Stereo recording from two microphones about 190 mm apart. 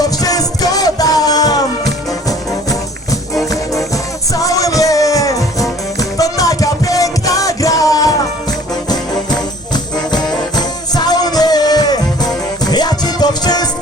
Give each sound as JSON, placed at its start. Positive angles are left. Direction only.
{"t": 0.0, "sound": "music", "side_deg": 20}
{"t": 10.5, "sound": "music", "side_deg": 20}